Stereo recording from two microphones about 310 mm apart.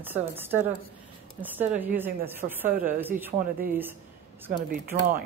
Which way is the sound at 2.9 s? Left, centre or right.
Centre.